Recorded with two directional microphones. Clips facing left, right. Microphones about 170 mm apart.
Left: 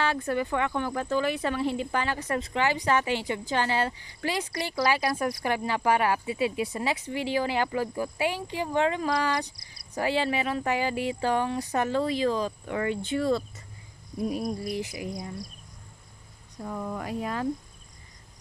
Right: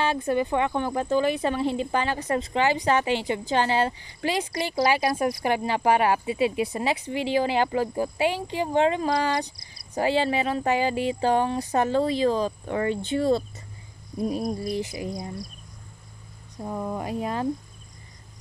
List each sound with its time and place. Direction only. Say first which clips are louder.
0.0 s speech: right 3 dB; 20° right (ahead or behind)
16.6 s speech: right 3 dB; 30° right (ahead or behind)